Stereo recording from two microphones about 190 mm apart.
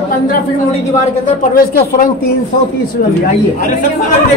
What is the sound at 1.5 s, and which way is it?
Speech, 50° left (ahead or behind).